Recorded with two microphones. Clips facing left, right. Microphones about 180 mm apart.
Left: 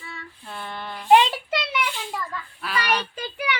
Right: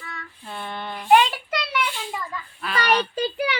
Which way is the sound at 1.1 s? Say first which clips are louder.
Left 1 dB; 25° left (ahead or behind).